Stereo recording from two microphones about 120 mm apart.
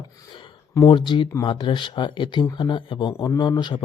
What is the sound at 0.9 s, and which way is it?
Speech, 40° left (ahead or behind).